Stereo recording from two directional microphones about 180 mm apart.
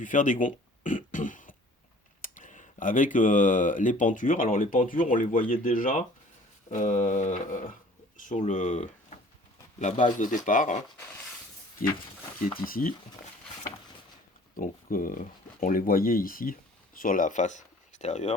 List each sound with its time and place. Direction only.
0.0 s a sound: 45° left (ahead or behind)
2.2 s speech: 45° left (ahead or behind)
6.7 s a sound: 45° left (ahead or behind)
8.3 s speech: 45° left (ahead or behind)
12.5 s speech: 50° left (ahead or behind)
14.5 s speech: 50° left (ahead or behind)